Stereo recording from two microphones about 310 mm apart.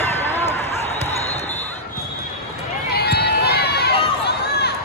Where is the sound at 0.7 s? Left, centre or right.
Left.